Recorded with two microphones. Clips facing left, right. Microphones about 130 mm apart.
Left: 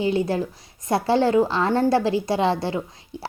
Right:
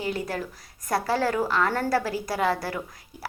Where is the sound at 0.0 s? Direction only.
25° left (ahead or behind).